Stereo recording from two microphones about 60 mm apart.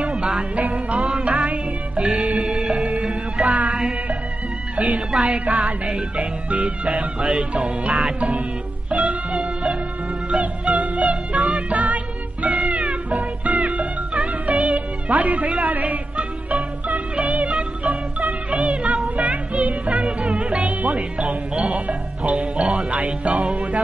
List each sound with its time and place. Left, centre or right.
0.0 s music: centre
4.7 s music: right
5.2 s speech: centre
8.9 s music: centre
21.2 s music: centre
21.7 s music: right
22.3 s music: centre
22.9 s speech: right
23.5 s music: right